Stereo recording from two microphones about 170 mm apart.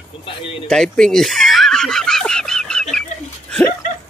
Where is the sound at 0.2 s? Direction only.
30° left (ahead or behind).